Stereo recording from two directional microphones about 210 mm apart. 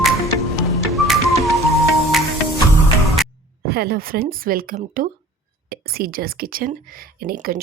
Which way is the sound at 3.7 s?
45° right (ahead or behind).